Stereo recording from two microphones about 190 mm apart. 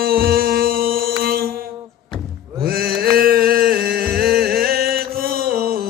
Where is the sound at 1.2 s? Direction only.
50° right (ahead or behind).